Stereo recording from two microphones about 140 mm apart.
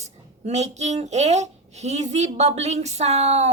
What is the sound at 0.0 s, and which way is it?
A child's voice, 55° right (ahead or behind).